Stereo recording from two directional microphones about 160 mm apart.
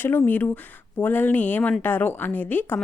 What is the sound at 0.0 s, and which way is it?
Speech, 10° left (ahead or behind).